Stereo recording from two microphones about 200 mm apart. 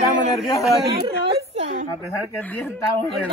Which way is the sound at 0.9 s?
20° right (ahead or behind).